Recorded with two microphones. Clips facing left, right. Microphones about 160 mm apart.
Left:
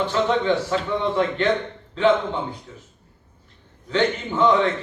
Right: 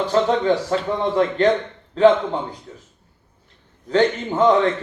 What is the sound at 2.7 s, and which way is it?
Speech, 45° right (ahead or behind).